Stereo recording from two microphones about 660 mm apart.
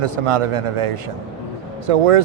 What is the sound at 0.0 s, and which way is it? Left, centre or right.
Speech, right.